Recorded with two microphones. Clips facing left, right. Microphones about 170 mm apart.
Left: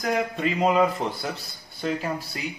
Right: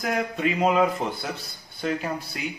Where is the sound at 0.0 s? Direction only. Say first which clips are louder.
Even; centre (ahead or behind).